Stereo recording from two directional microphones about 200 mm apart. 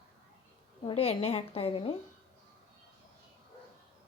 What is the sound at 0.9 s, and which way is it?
A woman's voice, 30° left (ahead or behind).